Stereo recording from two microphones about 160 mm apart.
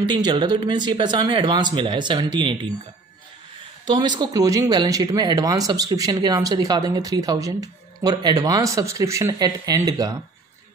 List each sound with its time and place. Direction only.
0.1 s speech: 30° right (ahead or behind)
3.8 s speech: 30° right (ahead or behind)